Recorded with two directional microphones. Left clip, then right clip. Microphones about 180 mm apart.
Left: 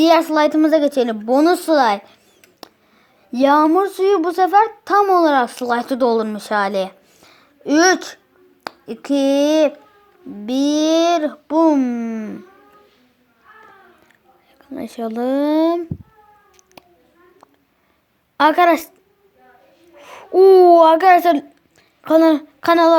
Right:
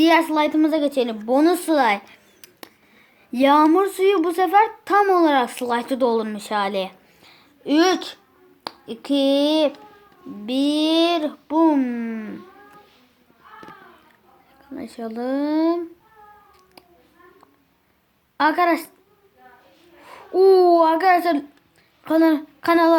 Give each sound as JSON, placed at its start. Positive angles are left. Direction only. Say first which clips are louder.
{"t": 0.0, "sound": "a child's voice", "louder": "left 4 dB", "side_deg": 30}
{"t": 3.3, "sound": "a child's voice", "louder": "left 2 dB", "side_deg": 20}
{"t": 6.7, "sound": "a sound", "louder": "left 4 dB", "side_deg": 30}
{"t": 8.6, "sound": "speech", "louder": "left 3 dB", "side_deg": 35}
{"t": 14.7, "sound": "speech", "louder": "left 6 dB", "side_deg": 30}
{"t": 16.8, "sound": "a sound", "louder": "left 5 dB", "side_deg": 35}
{"t": 18.3, "sound": "speech", "louder": "left 5 dB", "side_deg": 30}
{"t": 20.0, "sound": "a child's voice", "louder": "left 5 dB", "side_deg": 30}